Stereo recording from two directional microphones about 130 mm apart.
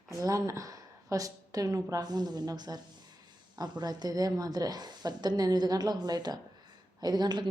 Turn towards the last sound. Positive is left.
turn(degrees=-35)  # may be behind; listen again after turning